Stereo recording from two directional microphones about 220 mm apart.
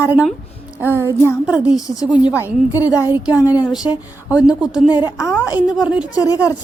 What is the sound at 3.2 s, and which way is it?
Speech, 15° left (ahead or behind).